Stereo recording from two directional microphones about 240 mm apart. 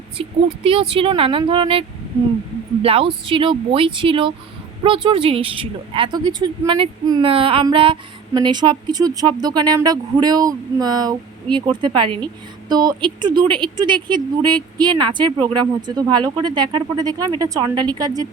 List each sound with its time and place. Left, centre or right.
0.2 s speech: right
2.8 s speech: right